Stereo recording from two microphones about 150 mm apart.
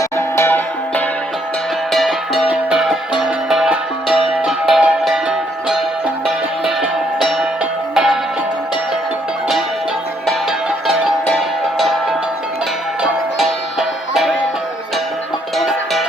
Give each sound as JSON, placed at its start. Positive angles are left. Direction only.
{"t": 0.2, "sound": "music", "side_deg": 15}
{"t": 1.9, "sound": "music", "side_deg": 0}
{"t": 10.8, "sound": "music", "side_deg": 0}
{"t": 15.5, "sound": "music", "side_deg": 0}